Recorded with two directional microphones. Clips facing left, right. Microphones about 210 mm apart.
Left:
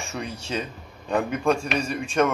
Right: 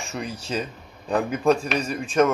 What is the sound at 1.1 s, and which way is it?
A man's voice, centre (ahead or behind).